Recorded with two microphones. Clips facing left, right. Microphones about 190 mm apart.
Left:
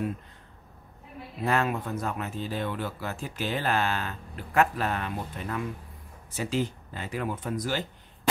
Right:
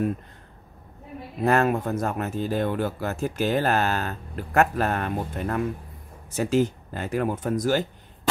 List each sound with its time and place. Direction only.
1.4 s speech: 45° right (ahead or behind)